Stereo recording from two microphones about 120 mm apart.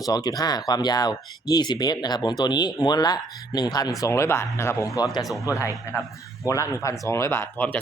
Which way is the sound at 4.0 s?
25° left (ahead or behind).